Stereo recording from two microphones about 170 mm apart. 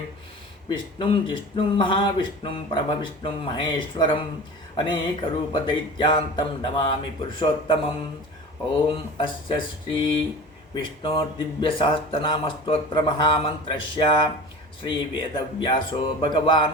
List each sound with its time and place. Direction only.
0.7 s speech: 30° left (ahead or behind)
8.9 s speech: 30° left (ahead or behind)